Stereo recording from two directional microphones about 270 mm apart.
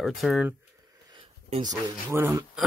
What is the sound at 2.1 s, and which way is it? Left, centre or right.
Speech, centre.